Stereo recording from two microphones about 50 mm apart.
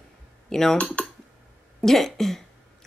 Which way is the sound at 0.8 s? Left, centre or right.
Left.